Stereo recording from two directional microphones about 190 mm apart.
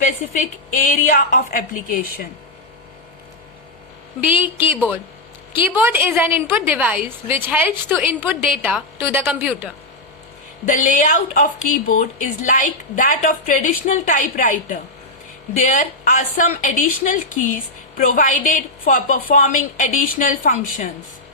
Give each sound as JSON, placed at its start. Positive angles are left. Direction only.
{"t": 0.0, "sound": "a woman's voice", "side_deg": 45}
{"t": 4.2, "sound": "a woman's voice", "side_deg": -10}
{"t": 10.7, "sound": "a woman's voice", "side_deg": 45}